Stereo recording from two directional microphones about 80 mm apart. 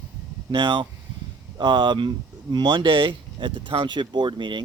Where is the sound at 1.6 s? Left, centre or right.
Right.